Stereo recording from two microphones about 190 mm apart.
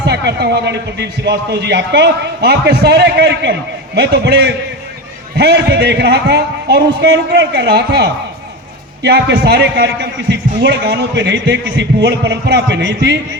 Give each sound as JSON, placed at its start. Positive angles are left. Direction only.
{"t": 0.0, "sound": "a man's voice", "side_deg": -60}